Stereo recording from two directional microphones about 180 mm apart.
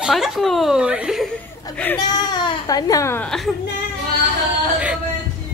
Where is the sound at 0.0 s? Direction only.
Centre (ahead or behind).